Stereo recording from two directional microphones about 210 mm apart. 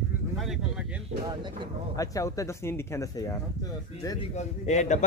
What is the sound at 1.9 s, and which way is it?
Speech, 15° left (ahead or behind).